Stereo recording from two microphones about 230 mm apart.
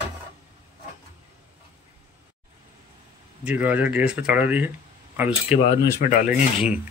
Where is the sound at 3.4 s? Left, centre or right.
Centre.